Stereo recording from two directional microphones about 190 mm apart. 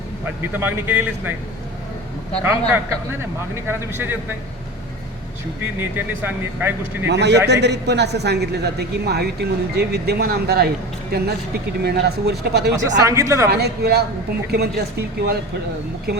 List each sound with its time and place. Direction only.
0.6 s a man's voice: 10° right (ahead or behind)
2.4 s a man's voice: 10° right (ahead or behind)
5.8 s a man's voice: 10° right (ahead or behind)
7.1 s a man's voice: 65° right (ahead or behind)
13.0 s a man's voice: 15° right (ahead or behind)
13.5 s a man's voice: 60° right (ahead or behind)